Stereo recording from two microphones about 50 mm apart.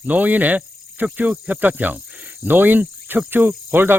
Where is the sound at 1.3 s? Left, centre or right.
Right.